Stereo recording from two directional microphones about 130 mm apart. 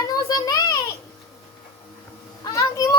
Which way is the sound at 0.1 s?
30° left (ahead or behind).